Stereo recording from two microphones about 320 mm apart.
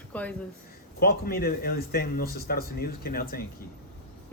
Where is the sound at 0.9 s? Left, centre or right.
Left.